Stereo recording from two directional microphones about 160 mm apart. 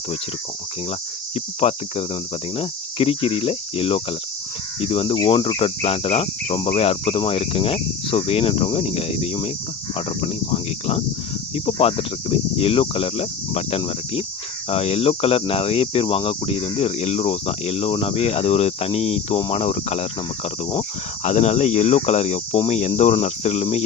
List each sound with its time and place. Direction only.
1.6 s speech: 35° left (ahead or behind)
21.2 s speech: 45° left (ahead or behind)